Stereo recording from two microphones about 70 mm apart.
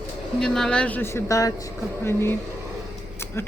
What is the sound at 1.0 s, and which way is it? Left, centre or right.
Speech, left.